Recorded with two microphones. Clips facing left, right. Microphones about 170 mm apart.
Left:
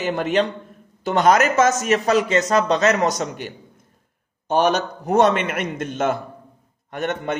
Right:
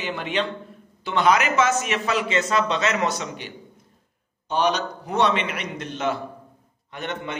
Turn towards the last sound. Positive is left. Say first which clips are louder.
# left 6 dB
turn(degrees=50)  # may be behind; listen again after turning